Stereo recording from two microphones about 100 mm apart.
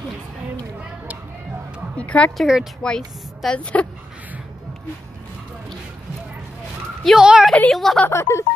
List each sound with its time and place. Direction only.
2.0 s speech: 10° left (ahead or behind)
2.3 s speech: 5° right (ahead or behind)
2.8 s speech: 10° left (ahead or behind)
7.2 s a woman's voice: 10° right (ahead or behind)
7.7 s speech: centre (ahead or behind)
8.1 s speech: 25° left (ahead or behind)